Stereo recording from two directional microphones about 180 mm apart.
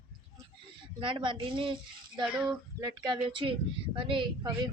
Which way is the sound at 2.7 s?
25° right (ahead or behind).